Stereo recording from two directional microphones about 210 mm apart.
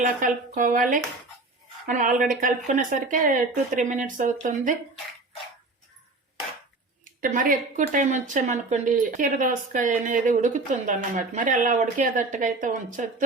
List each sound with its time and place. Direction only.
0.2 s speech: 40° right (ahead or behind)
7.0 s speech: 40° right (ahead or behind)